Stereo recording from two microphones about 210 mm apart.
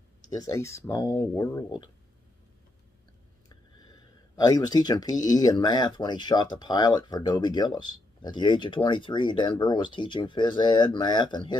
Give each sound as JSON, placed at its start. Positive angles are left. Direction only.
{"t": 0.2, "sound": "speech", "side_deg": 20}
{"t": 3.4, "sound": "speech", "side_deg": 20}